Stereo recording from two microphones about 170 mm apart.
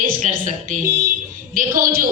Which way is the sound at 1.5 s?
55° right (ahead or behind).